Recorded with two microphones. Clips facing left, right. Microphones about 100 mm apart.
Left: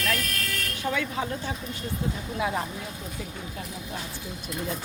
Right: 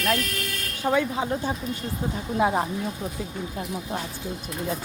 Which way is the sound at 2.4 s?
35° right (ahead or behind).